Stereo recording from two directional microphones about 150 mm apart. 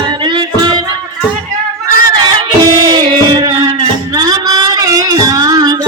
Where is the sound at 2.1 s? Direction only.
25° right (ahead or behind).